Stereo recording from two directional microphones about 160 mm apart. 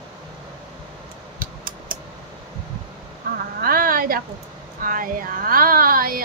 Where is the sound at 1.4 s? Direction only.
60° right (ahead or behind).